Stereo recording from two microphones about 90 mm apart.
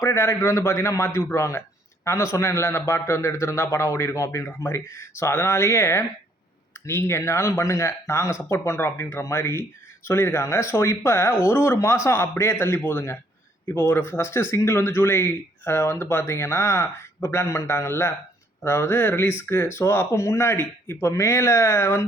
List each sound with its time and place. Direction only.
0.0 s a man's voice: 30° left (ahead or behind)